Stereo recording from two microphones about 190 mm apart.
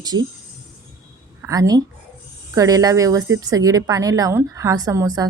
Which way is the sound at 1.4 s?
20° right (ahead or behind).